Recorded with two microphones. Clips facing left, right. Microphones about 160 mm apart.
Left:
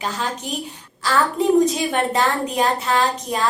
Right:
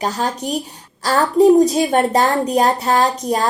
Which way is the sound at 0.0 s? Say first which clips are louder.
Right 5 dB; 40° right (ahead or behind).